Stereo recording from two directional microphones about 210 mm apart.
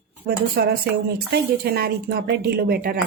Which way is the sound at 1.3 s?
45° right (ahead or behind).